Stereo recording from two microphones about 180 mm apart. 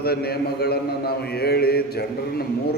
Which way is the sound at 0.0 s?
60° left (ahead or behind).